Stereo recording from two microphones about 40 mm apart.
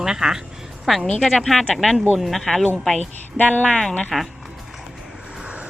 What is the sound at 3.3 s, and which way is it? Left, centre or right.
Music, left.